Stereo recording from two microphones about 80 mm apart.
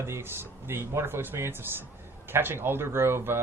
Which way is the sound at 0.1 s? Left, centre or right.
Right.